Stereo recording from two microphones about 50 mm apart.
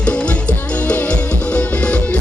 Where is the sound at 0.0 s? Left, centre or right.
Left.